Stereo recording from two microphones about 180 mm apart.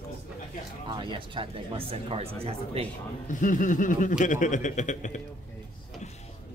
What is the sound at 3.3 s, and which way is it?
Speech, 45° left (ahead or behind).